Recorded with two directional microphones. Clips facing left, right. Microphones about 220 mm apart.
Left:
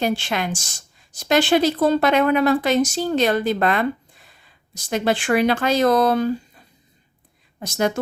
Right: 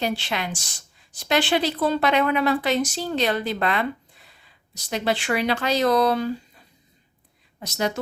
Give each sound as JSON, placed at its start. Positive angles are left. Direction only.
{"t": 0.0, "sound": "a woman's voice", "side_deg": 50}
{"t": 7.6, "sound": "a woman's voice", "side_deg": 50}